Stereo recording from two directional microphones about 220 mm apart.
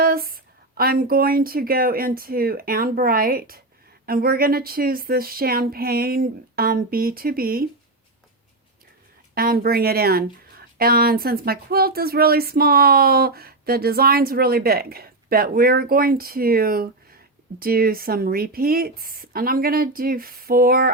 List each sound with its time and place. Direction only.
0.0 s a sound: 40° right (ahead or behind)
0.8 s speech: 40° right (ahead or behind)
9.3 s speech: 45° right (ahead or behind)